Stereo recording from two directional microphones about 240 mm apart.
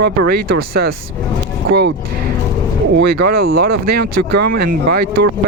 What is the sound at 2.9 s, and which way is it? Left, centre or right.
Speech, right.